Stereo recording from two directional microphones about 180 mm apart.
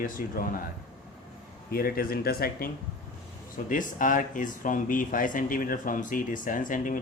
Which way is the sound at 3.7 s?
45° left (ahead or behind).